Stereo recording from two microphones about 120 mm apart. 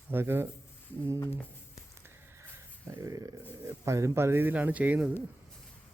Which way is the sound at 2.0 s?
20° right (ahead or behind).